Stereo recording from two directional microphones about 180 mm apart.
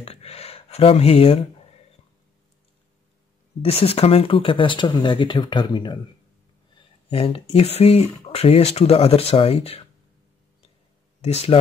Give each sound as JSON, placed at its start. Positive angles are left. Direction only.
{"t": 0.0, "sound": "speech", "side_deg": 35}
{"t": 3.6, "sound": "speech", "side_deg": 35}
{"t": 7.1, "sound": "speech", "side_deg": 30}
{"t": 11.1, "sound": "speech", "side_deg": 35}